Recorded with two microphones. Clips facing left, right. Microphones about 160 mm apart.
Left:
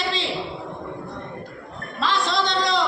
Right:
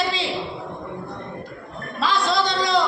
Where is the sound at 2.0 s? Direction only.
Centre (ahead or behind).